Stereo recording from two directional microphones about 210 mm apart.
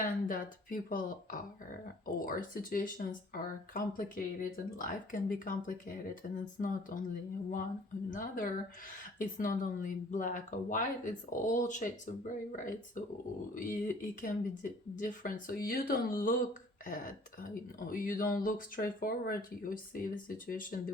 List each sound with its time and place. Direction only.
0.0 s speech: 40° left (ahead or behind)
8.1 s speech: 40° left (ahead or behind)
17.4 s speech: 40° left (ahead or behind)